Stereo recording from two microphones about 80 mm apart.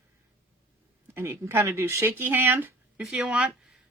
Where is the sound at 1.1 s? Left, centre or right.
Right.